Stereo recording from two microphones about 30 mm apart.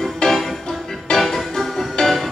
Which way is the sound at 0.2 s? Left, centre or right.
Left.